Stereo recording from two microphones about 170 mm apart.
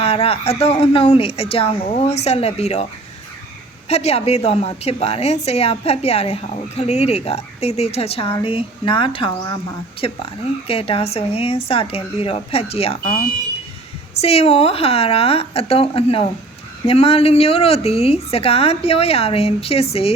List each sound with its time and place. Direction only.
0.0 s a woman's voice: 35° left (ahead or behind)
3.8 s a woman's voice: 40° left (ahead or behind)
10.7 s a woman's voice: 35° left (ahead or behind)
14.2 s a woman's voice: 35° left (ahead or behind)